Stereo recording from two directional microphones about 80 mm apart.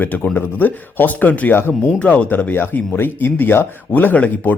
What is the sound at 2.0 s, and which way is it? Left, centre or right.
Speech, centre.